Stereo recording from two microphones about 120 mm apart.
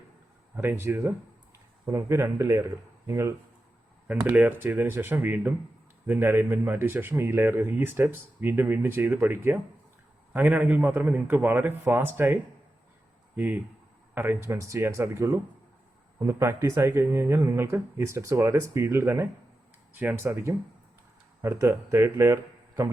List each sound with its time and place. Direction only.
0.5 s speech: 15° right (ahead or behind)
4.0 s speech: 10° right (ahead or behind)